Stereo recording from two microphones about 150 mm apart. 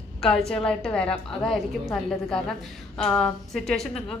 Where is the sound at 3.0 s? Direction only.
5° left (ahead or behind).